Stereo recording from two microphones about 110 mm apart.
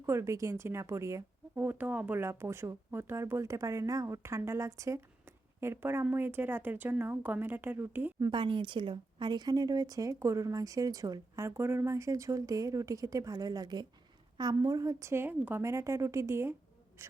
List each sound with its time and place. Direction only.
0.0 s speech: 25° right (ahead or behind)
8.2 s speech: 45° right (ahead or behind)
11.4 s speech: 20° right (ahead or behind)